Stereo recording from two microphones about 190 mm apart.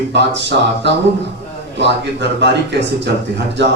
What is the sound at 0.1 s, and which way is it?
Speech, 65° right (ahead or behind).